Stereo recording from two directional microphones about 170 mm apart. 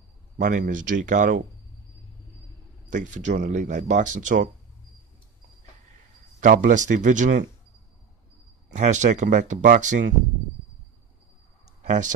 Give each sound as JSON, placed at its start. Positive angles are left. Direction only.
{"t": 0.4, "sound": "speech", "side_deg": -50}
{"t": 2.9, "sound": "speech", "side_deg": -45}
{"t": 6.4, "sound": "speech", "side_deg": -50}
{"t": 8.7, "sound": "speech", "side_deg": -45}
{"t": 11.6, "sound": "a sound", "side_deg": -45}